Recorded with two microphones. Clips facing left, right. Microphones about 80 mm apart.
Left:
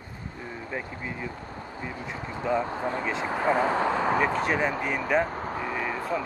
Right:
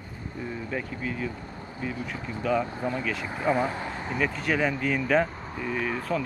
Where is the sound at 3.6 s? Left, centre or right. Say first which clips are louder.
Left 8 dB; left.